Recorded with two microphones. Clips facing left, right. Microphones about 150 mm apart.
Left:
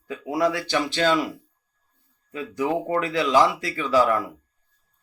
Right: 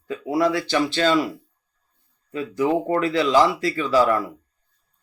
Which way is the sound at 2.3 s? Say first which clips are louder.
Right 4 dB; 10° left (ahead or behind).